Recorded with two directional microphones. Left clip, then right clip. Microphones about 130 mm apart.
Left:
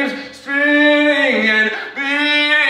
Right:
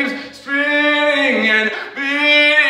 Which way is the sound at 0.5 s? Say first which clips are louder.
Left 2 dB; centre (ahead or behind).